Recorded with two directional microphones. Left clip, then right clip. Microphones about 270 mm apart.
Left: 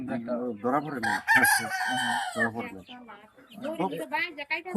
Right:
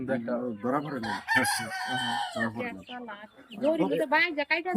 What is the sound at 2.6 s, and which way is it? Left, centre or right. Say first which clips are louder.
Speech: right 2 dB; centre.